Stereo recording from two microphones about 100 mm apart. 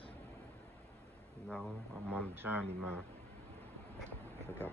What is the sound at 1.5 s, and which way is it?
Speech, 10° left (ahead or behind).